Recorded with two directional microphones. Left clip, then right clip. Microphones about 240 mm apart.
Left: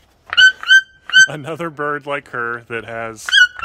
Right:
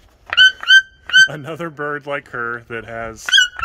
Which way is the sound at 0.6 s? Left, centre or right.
Right.